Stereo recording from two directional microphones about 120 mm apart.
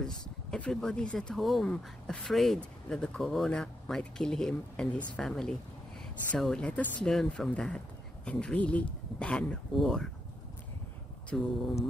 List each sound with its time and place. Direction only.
0.5 s speech: 5° left (ahead or behind)
11.2 s speech: centre (ahead or behind)